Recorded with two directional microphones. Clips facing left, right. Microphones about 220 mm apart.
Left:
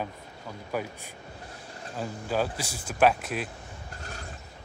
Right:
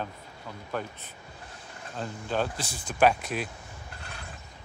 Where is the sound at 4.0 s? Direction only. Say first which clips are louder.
Left 4 dB; 40° left (ahead or behind).